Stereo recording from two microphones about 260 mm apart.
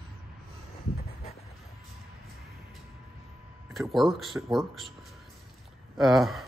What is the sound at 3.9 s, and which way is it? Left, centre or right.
Speech, centre.